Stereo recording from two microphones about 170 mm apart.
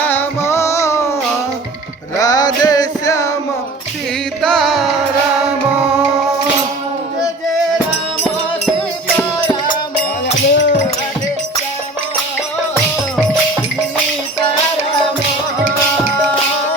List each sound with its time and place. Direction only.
0.0 s music: 10° left (ahead or behind)
2.1 s music: 20° left (ahead or behind)
4.4 s music: centre (ahead or behind)
10.4 s music: 90° left
12.7 s music: 5° left (ahead or behind)